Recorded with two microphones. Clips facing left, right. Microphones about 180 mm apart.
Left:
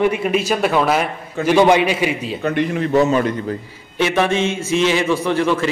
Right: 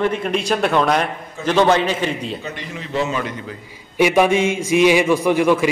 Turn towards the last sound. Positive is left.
turn(degrees=-10)  # may be behind; listen again after turning